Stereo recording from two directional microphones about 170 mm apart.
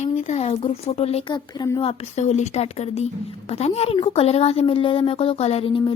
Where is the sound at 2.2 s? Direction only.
40° left (ahead or behind).